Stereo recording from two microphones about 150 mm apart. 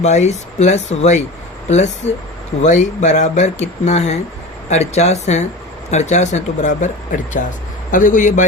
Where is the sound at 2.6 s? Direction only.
55° left (ahead or behind).